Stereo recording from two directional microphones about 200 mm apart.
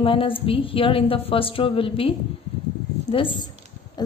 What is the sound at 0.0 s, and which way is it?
A woman's voice, 25° left (ahead or behind).